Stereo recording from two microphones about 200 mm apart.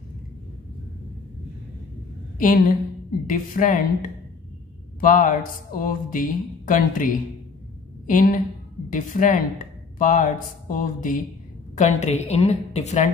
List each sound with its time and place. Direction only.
2.3 s a woman's voice: 45° left (ahead or behind)
8.1 s a woman's voice: 40° left (ahead or behind)